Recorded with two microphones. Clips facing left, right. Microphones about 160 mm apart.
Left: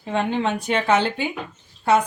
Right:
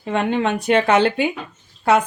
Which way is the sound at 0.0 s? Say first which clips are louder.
Right 3 dB; 65° right (ahead or behind).